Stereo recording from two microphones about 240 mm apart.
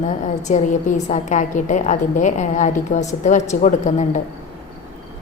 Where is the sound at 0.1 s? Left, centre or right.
Left.